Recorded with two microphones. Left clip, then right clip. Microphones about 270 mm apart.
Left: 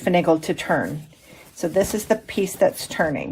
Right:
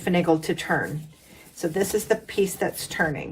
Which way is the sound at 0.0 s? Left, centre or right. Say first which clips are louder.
Left 4 dB; left.